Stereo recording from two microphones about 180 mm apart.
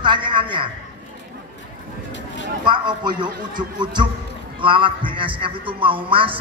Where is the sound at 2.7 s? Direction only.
25° right (ahead or behind).